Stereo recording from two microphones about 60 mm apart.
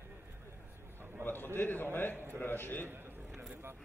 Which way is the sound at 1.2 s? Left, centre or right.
Left.